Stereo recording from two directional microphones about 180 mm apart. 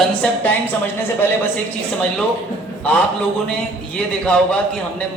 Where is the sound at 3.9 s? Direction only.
5° left (ahead or behind).